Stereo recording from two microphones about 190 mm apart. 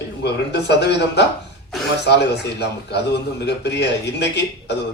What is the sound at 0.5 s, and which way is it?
Speech, 65° left (ahead or behind).